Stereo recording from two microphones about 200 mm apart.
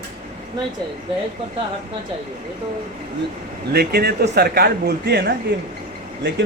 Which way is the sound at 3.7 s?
50° right (ahead or behind).